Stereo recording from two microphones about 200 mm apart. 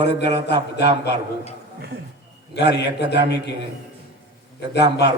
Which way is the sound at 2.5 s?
60° left (ahead or behind).